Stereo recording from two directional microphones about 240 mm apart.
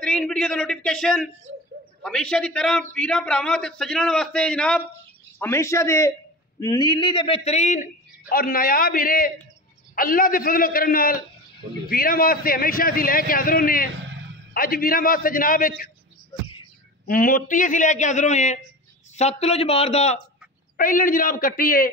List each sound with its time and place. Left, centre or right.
0.0 s a man's voice: centre; by 15.7 s left
17.1 s a man's voice: left